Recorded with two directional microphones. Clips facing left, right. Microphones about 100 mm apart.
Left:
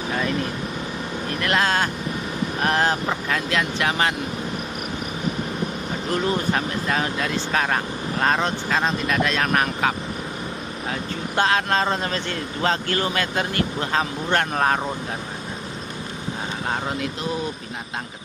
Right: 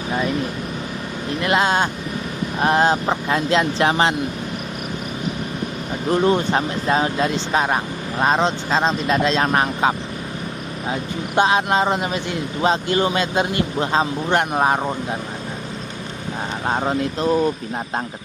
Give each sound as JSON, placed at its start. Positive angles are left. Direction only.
{"t": 1.4, "sound": "speech", "side_deg": -20}
{"t": 6.0, "sound": "speech", "side_deg": -25}
{"t": 16.6, "sound": "speech", "side_deg": -30}